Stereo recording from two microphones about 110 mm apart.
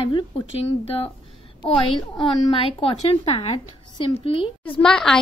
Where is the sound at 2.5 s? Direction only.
55° left (ahead or behind).